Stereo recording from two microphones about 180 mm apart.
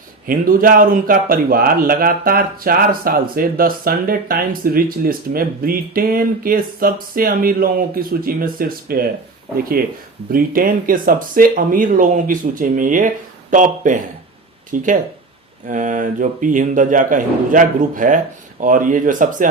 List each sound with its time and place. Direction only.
0.3 s a man's voice: 50° right (ahead or behind)
10.3 s a man's voice: 50° right (ahead or behind)